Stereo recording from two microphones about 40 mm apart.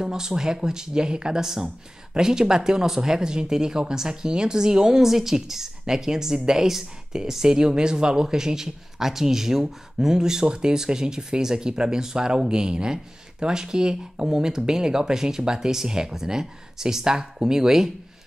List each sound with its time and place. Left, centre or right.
0.0 s speech: centre